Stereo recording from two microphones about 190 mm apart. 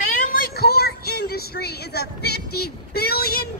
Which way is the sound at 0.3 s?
50° left (ahead or behind).